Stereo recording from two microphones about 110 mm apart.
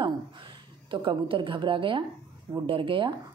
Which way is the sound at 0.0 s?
45° right (ahead or behind).